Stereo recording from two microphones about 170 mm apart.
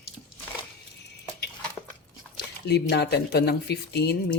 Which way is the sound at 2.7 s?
75° left (ahead or behind).